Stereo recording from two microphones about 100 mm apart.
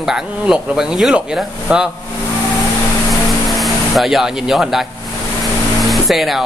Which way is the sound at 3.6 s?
Centre (ahead or behind).